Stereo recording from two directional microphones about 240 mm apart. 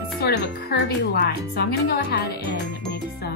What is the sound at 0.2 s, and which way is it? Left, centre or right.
Speech, left.